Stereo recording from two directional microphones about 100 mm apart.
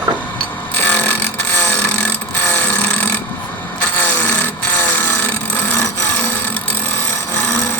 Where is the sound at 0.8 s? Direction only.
15° left (ahead or behind).